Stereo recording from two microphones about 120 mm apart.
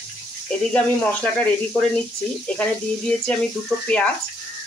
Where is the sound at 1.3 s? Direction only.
15° left (ahead or behind).